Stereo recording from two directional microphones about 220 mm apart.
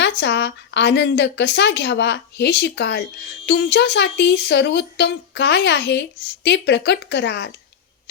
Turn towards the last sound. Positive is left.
turn(degrees=50)  # may be behind; listen again after turning